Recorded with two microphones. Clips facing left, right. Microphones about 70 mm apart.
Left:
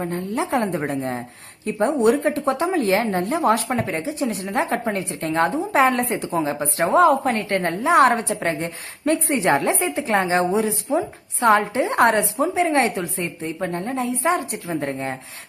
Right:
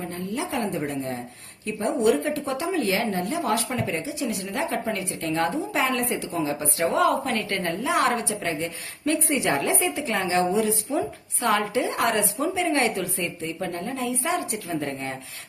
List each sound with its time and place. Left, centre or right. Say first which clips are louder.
0.0 s a woman's voice: left 5 dB; left